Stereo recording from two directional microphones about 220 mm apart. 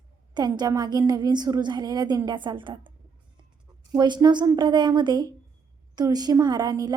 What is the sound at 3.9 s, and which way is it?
A woman's voice, 20° right (ahead or behind).